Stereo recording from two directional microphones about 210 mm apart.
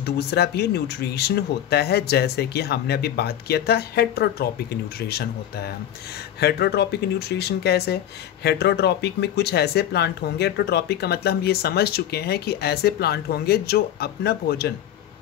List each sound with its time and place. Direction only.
0.0 s speech: 50° left (ahead or behind)